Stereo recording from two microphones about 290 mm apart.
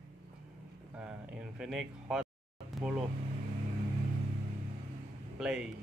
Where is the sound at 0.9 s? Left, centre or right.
Centre.